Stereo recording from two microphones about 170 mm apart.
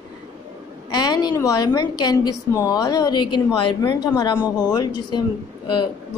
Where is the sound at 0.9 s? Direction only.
25° left (ahead or behind).